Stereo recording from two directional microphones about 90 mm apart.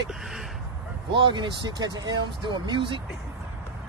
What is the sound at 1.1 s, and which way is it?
Speech, 65° right (ahead or behind).